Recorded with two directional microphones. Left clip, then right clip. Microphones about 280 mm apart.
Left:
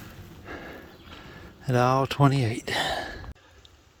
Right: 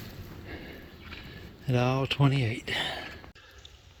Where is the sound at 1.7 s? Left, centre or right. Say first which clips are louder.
Left 6 dB; centre.